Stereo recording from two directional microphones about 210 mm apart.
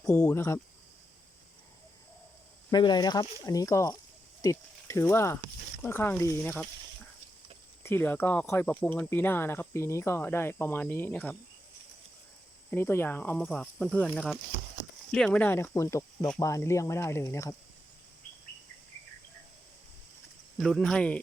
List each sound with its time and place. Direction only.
0.1 s speech: 5° left (ahead or behind)
2.6 s speech: 20° left (ahead or behind)
12.7 s speech: 10° left (ahead or behind)
20.6 s speech: centre (ahead or behind)